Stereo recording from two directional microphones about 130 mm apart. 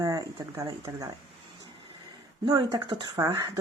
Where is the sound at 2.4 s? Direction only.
35° right (ahead or behind).